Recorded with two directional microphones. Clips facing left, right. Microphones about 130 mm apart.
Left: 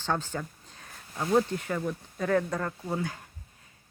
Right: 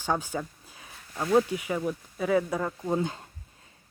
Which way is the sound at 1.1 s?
20° right (ahead or behind).